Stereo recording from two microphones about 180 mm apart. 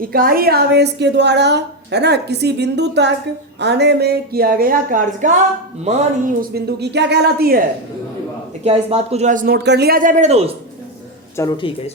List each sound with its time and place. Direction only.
0.0 s a woman's voice: 55° right (ahead or behind)
8.6 s speech: 35° right (ahead or behind)
9.6 s speech: 65° right (ahead or behind); by 10.5 s 35° right (ahead or behind)
11.3 s speech: 25° left (ahead or behind)